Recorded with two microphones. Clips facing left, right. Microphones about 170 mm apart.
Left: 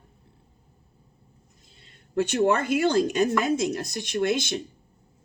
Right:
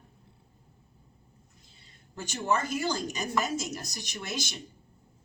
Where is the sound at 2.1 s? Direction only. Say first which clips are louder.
Left 8 dB; 65° left (ahead or behind).